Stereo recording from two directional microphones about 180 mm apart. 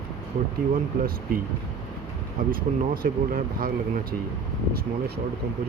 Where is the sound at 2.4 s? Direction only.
50° right (ahead or behind).